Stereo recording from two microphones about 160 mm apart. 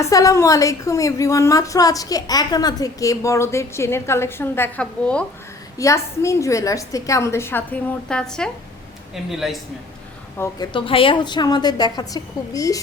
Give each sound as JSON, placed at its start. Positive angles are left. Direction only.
{"t": 0.0, "sound": "a woman's voice", "side_deg": 20}
{"t": 5.7, "sound": "a woman's voice", "side_deg": 20}
{"t": 10.3, "sound": "a woman's voice", "side_deg": 15}
{"t": 10.7, "sound": "a woman's voice", "side_deg": 35}